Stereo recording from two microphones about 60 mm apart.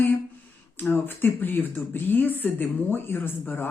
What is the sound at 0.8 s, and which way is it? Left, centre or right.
Speech, left.